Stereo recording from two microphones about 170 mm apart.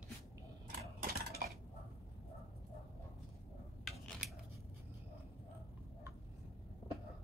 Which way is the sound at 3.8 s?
Centre (ahead or behind).